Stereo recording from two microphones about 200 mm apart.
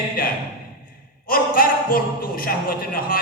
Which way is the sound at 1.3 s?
45° left (ahead or behind).